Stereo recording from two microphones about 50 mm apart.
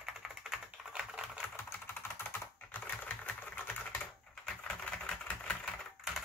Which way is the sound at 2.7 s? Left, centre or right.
Left.